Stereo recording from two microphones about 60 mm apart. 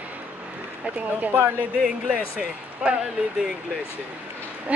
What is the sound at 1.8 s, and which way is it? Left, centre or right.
Speech, centre.